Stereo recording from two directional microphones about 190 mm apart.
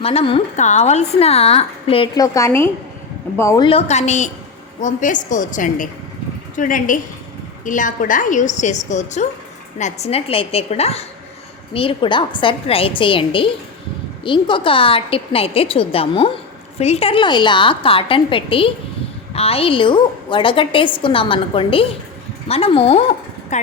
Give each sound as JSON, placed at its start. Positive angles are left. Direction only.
{"t": 0.0, "sound": "a woman's voice", "side_deg": 30}
{"t": 2.1, "sound": "a woman's voice", "side_deg": 15}
{"t": 3.7, "sound": "a woman's voice", "side_deg": 35}